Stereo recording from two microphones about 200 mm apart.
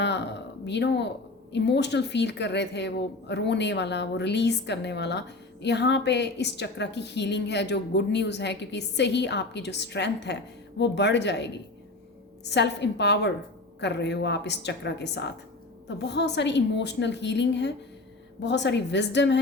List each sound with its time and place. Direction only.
0.0 s a woman's voice: 60° left (ahead or behind)